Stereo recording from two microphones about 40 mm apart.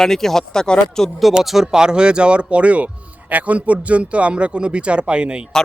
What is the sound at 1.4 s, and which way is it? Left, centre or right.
Speech, centre.